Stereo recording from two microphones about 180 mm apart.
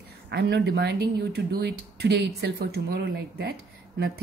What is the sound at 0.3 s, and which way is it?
A woman's voice, 70° right (ahead or behind).